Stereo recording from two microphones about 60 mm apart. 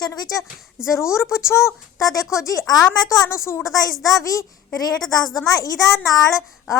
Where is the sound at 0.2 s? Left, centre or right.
Left.